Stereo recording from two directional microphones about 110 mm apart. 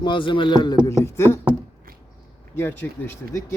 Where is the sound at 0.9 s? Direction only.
25° left (ahead or behind).